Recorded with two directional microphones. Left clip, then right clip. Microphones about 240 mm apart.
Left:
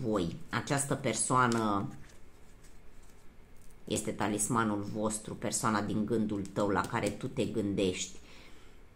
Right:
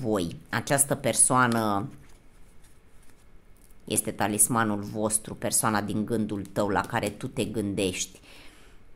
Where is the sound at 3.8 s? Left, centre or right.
Right.